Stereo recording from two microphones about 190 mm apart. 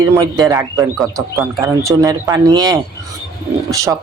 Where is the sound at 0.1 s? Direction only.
15° right (ahead or behind).